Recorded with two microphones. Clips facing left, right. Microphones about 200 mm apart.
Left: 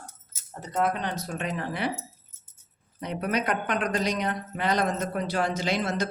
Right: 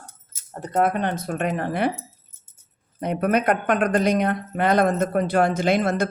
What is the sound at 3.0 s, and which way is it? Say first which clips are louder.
Speech: right 7 dB; 55° right (ahead or behind).